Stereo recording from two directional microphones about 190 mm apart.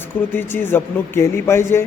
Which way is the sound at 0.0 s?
10° left (ahead or behind).